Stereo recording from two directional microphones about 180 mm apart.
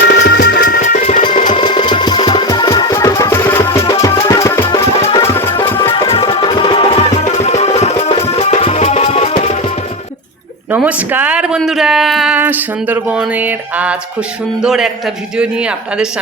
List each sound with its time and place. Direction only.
0.1 s music: 70° left (ahead or behind)
0.6 s music: 55° left (ahead or behind)
1.5 s music: 25° left (ahead or behind)
4.6 s music: 30° left (ahead or behind)
10.7 s a man's voice: 10° right (ahead or behind)